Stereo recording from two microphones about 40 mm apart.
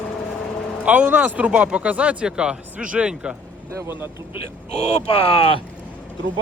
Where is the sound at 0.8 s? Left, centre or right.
Right.